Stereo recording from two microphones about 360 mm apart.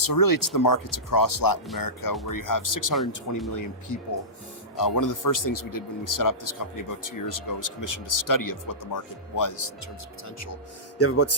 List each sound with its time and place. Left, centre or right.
0.0 s speech: left
10.4 s speech: left